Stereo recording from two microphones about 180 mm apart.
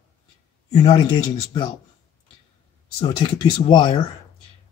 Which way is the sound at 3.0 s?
25° left (ahead or behind).